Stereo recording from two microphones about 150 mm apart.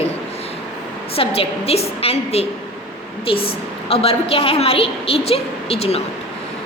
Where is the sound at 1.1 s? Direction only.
40° left (ahead or behind).